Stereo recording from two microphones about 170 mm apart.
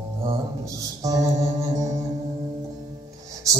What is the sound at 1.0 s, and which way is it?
Music, 20° right (ahead or behind).